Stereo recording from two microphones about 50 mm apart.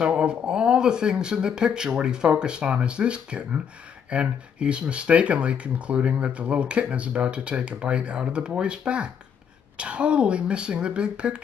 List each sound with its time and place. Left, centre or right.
0.0 s speech: right